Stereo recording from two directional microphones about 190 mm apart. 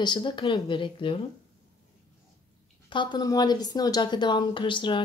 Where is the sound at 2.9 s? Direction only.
25° left (ahead or behind).